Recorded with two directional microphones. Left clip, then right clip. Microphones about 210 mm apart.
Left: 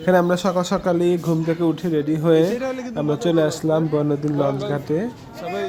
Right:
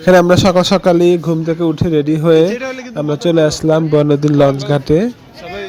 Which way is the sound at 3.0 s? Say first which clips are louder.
Right 7 dB; 20° right (ahead or behind).